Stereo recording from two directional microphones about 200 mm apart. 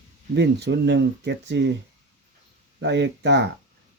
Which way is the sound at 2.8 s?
60° right (ahead or behind).